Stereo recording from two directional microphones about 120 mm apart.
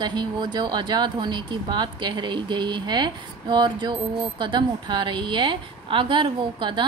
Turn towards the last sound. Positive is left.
turn(degrees=-40)  # may be behind; listen again after turning